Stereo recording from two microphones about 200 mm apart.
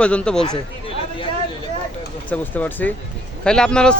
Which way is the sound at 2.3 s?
10° left (ahead or behind).